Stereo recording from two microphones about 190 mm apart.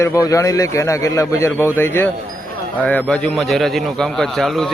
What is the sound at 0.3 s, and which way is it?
A man's voice, 15° left (ahead or behind).